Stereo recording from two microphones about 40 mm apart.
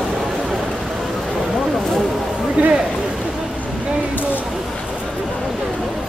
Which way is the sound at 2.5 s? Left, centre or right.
Right.